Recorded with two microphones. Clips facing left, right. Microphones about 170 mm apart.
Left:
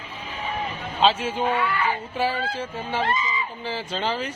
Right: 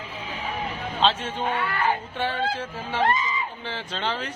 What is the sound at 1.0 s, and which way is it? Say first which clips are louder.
Speech: left 3 dB; 5° left (ahead or behind).